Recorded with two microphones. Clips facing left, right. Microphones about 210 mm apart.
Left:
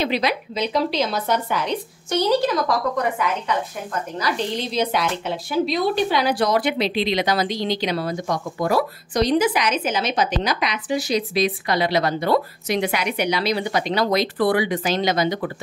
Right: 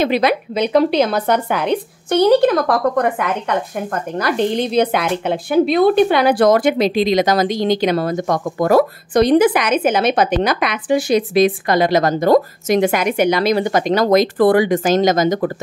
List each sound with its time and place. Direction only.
0.0 s speech: 55° right (ahead or behind)